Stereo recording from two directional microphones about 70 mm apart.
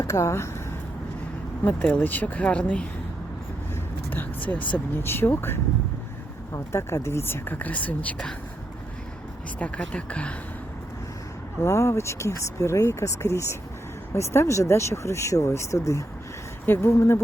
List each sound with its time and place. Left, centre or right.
0.0 s speech: left
1.6 s speech: centre
4.1 s speech: left
9.6 s speech: centre
11.6 s speech: left
16.6 s speech: left